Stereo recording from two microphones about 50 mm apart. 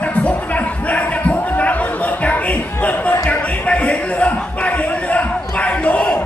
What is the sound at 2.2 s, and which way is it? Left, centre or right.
Basketball bounce, left.